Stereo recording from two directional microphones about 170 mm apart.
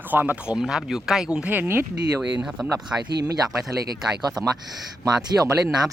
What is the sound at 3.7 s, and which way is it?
Speech, 65° right (ahead or behind).